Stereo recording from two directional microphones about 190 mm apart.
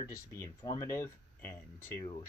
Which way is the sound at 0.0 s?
15° left (ahead or behind).